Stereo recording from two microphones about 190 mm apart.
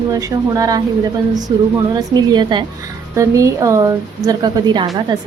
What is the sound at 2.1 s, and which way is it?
A woman's voice, 20° right (ahead or behind).